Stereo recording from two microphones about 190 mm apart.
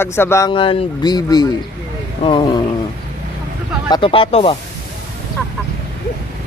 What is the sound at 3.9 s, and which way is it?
Speech, 25° left (ahead or behind).